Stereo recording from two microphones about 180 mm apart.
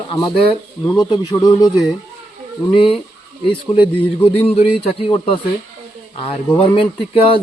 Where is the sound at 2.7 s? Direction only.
30° left (ahead or behind).